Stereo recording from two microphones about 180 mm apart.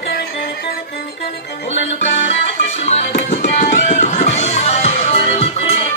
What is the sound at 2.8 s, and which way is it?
Music, 40° left (ahead or behind).